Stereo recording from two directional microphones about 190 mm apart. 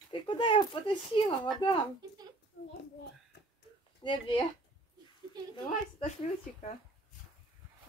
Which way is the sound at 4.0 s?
25° left (ahead or behind).